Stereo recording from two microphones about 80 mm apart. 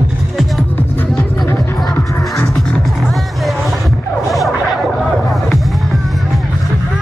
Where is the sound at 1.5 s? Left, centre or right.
Left.